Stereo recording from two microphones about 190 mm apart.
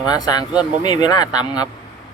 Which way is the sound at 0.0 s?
20° left (ahead or behind).